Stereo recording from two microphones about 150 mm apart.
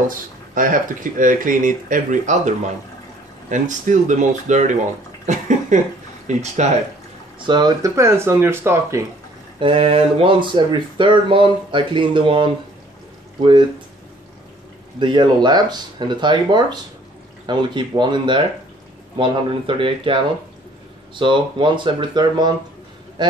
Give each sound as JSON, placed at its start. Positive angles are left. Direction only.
{"t": 0.1, "sound": "speech", "side_deg": -65}
{"t": 5.2, "sound": "a sound", "side_deg": -55}
{"t": 6.2, "sound": "speech", "side_deg": -50}
{"t": 7.3, "sound": "speech", "side_deg": -30}
{"t": 9.6, "sound": "speech", "side_deg": -35}
{"t": 15.0, "sound": "speech", "side_deg": -30}